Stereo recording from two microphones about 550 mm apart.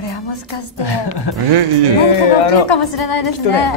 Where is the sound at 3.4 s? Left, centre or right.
Left.